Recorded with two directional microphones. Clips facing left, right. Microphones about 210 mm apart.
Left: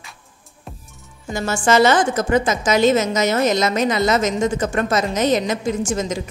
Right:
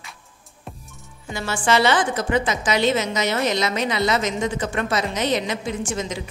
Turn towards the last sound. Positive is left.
turn(degrees=45)  # may be behind; listen again after turning